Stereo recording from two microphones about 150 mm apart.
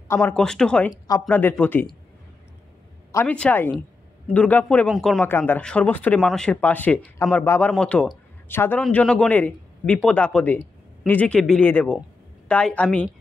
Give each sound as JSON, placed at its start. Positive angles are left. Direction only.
{"t": 0.1, "sound": "speech", "side_deg": 15}
{"t": 0.4, "sound": "speech", "side_deg": 5}
{"t": 3.1, "sound": "speech", "side_deg": 20}
{"t": 5.2, "sound": "speech", "side_deg": 10}